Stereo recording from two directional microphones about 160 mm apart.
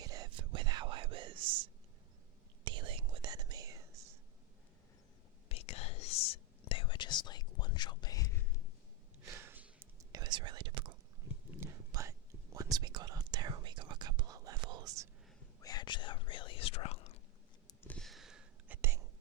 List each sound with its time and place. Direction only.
0.0 s whispering: 25° right (ahead or behind)
2.6 s whispering: 30° right (ahead or behind)
5.5 s whispering: 40° left (ahead or behind)
9.2 s whispering: 15° right (ahead or behind)
11.5 s whispering: 15° right (ahead or behind)
15.6 s whispering: 25° left (ahead or behind)
17.8 s a sound: 5° left (ahead or behind)
18.8 s whispering: 15° right (ahead or behind)